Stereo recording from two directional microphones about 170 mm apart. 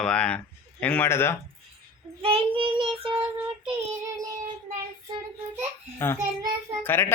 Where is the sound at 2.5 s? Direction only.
30° right (ahead or behind).